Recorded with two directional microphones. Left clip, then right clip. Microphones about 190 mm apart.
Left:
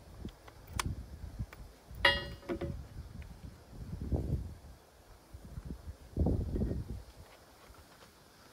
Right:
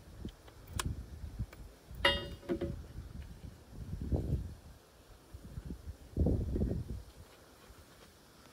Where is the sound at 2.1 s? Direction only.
5° left (ahead or behind).